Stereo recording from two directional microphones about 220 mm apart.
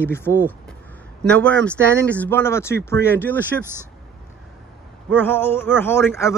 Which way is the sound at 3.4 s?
10° right (ahead or behind).